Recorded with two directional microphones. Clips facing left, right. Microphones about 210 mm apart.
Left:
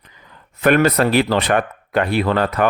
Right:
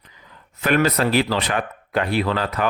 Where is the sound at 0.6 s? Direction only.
55° left (ahead or behind).